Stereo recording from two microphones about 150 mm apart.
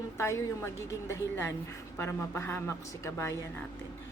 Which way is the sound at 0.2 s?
20° left (ahead or behind).